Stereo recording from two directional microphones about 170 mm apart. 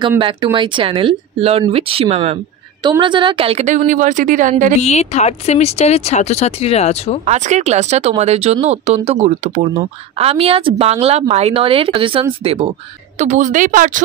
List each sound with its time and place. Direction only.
0.2 s a woman's voice: 30° right (ahead or behind); by 4.7 s 50° right (ahead or behind)
4.8 s speech: 40° left (ahead or behind)
7.2 s speech: 45° right (ahead or behind)
13.2 s a woman's voice: 45° right (ahead or behind)